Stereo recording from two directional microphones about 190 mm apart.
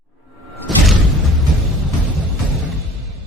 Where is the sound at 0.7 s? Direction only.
Centre (ahead or behind).